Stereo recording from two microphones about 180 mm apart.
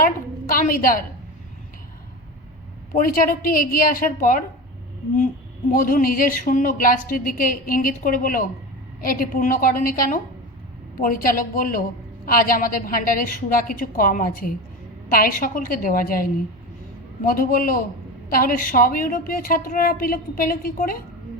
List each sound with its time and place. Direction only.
0.0 s a woman's voice: 50° left (ahead or behind)
2.9 s a woman's voice: 50° left (ahead or behind)
5.7 s a woman's voice: 50° left (ahead or behind)
17.2 s a woman's voice: 50° left (ahead or behind)